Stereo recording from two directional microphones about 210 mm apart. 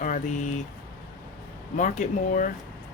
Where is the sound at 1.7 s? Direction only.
35° left (ahead or behind).